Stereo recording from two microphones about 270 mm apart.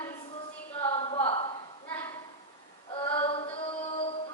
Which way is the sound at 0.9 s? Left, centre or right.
Left.